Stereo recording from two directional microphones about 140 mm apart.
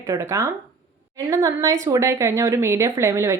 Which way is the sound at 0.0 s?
20° right (ahead or behind).